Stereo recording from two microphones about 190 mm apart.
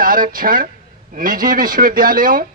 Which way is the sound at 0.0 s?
45° right (ahead or behind).